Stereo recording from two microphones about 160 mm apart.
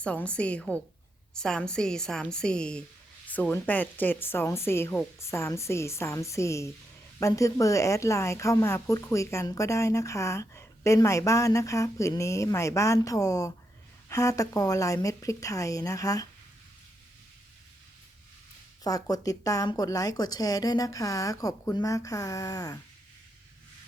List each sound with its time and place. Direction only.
0.0 s a woman's voice: 5° left (ahead or behind)
18.8 s speech: 25° left (ahead or behind)